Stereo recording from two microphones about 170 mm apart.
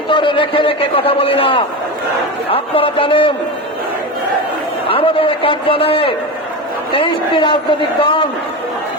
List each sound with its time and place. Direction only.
0.1 s a man's voice: 30° left (ahead or behind)
4.9 s a man's voice: 35° left (ahead or behind)